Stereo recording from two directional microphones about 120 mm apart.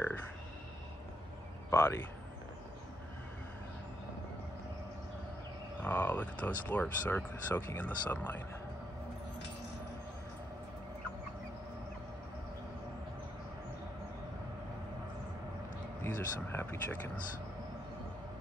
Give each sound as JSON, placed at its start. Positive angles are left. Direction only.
{"t": 1.7, "sound": "speech", "side_deg": 20}
{"t": 5.8, "sound": "speech", "side_deg": 15}
{"t": 16.0, "sound": "speech", "side_deg": 20}